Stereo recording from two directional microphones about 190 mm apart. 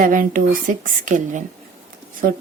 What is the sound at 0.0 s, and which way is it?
Speech, 45° right (ahead or behind).